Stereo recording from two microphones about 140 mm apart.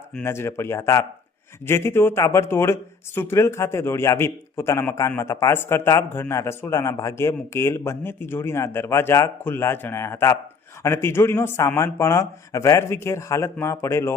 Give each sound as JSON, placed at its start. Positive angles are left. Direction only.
{"t": 0.1, "sound": "a man's voice", "side_deg": 15}